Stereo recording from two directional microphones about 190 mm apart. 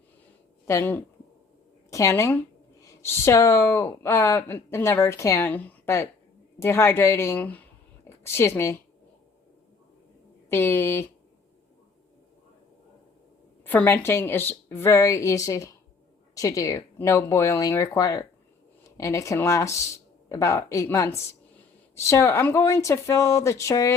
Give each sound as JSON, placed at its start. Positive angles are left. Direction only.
{"t": 0.7, "sound": "a woman's voice", "side_deg": 10}
{"t": 10.5, "sound": "speech", "side_deg": 10}
{"t": 13.7, "sound": "speech", "side_deg": 10}